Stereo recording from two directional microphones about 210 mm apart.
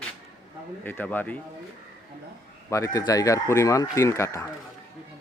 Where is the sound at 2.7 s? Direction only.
15° left (ahead or behind).